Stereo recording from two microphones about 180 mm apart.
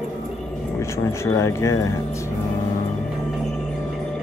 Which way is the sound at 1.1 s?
15° left (ahead or behind).